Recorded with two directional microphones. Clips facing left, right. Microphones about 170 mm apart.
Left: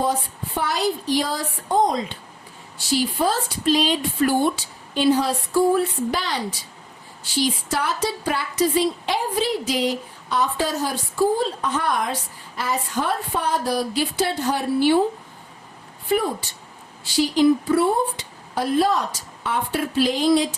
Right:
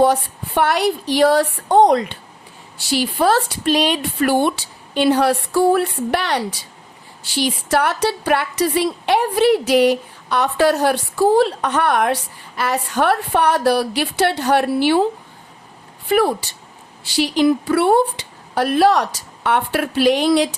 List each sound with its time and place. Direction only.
0.0 s a woman's voice: 70° right (ahead or behind)
16.0 s a woman's voice: 75° right (ahead or behind)